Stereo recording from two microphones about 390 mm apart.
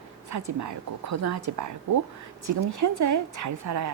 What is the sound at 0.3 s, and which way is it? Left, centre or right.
A woman's voice, right.